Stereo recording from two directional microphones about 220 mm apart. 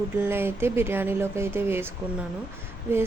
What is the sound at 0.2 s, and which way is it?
Speech, 10° right (ahead or behind).